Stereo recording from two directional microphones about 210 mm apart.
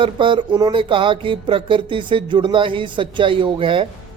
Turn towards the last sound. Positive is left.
turn(degrees=-25)  # may be behind; listen again after turning